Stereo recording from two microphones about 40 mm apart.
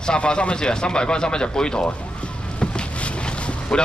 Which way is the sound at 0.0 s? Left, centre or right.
Left.